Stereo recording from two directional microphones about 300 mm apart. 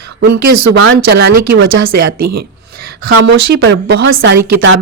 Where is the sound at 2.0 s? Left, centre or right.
Right.